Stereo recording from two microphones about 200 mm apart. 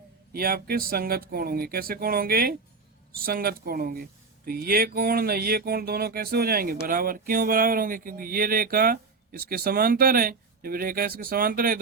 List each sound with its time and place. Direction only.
0.3 s speech: 50° right (ahead or behind)